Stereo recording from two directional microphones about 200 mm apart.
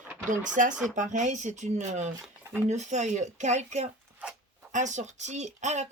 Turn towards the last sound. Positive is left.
turn(degrees=-35)  # may be behind; listen again after turning